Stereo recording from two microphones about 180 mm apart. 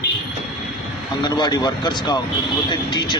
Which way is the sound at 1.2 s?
25° left (ahead or behind).